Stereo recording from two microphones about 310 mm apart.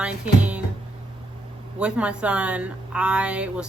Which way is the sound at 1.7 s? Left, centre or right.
Centre.